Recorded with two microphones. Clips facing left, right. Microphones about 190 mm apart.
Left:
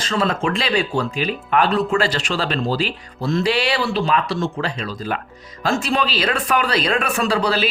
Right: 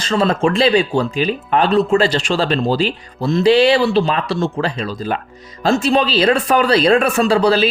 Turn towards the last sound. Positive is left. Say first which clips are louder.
# right 6 dB
turn(degrees=-25)  # may be behind; listen again after turning